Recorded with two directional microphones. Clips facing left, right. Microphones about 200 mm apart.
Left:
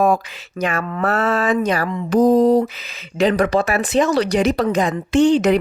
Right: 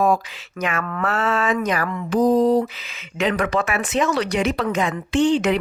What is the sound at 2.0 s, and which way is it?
Speech, 45° left (ahead or behind).